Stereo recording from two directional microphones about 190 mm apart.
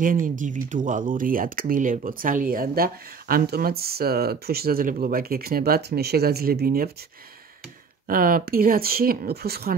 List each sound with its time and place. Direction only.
0.0 s speech: 45° right (ahead or behind)
8.1 s speech: 50° right (ahead or behind)